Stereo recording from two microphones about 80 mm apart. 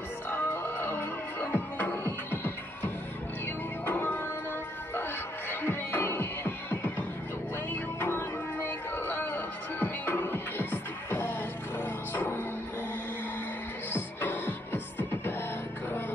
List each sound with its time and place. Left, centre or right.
0.3 s music: left
5.5 s music: left
13.9 s music: left